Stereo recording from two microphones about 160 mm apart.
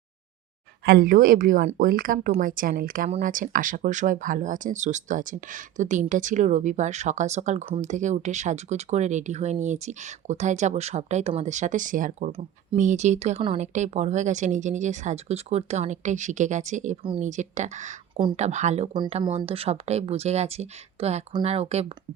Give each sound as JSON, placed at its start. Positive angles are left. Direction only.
{"t": 0.9, "sound": "speech", "side_deg": -65}
{"t": 17.0, "sound": "speech", "side_deg": -35}
{"t": 17.2, "sound": "speech", "side_deg": -50}
{"t": 19.2, "sound": "speech", "side_deg": -30}